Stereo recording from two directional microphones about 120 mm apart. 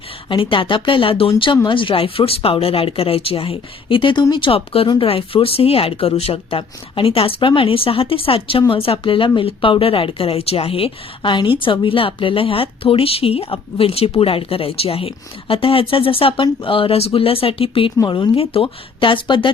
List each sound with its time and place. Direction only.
0.3 s speech: 45° left (ahead or behind)
18.0 s speech: 35° left (ahead or behind)
18.3 s speech: 50° left (ahead or behind)